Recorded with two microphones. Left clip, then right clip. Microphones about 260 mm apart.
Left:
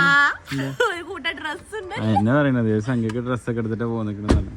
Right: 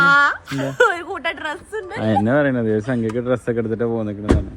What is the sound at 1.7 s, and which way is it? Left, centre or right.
Speech, left.